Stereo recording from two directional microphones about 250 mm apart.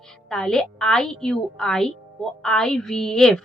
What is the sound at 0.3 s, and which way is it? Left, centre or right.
Speech, centre.